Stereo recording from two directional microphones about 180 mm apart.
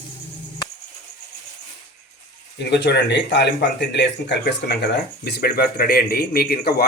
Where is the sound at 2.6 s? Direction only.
70° left (ahead or behind).